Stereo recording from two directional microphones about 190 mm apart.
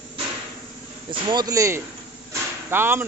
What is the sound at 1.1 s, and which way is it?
Speech, 25° right (ahead or behind).